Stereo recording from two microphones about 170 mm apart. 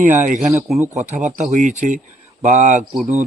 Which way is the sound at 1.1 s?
45° right (ahead or behind).